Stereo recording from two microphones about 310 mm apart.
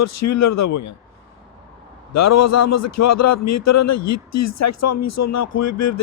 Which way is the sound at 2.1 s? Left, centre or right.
Left.